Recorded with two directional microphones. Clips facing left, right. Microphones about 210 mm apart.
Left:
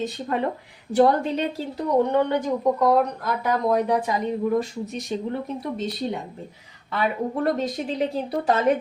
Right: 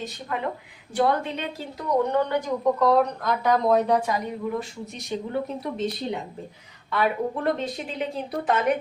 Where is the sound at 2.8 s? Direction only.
5° left (ahead or behind).